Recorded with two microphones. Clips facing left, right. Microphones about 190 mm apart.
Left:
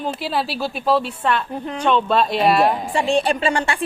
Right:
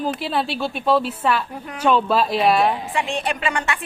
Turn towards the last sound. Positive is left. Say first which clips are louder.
# left 4 dB
turn(degrees=30)  # may be behind; listen again after turning